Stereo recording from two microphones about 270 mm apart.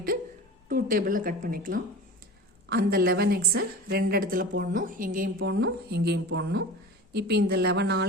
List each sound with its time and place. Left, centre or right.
0.7 s a woman's voice: right